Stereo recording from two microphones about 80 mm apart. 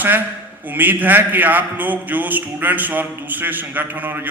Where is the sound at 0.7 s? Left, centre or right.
Right.